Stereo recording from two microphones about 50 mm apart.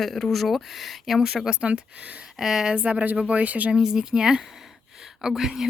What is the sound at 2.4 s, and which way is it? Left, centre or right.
Speech, centre.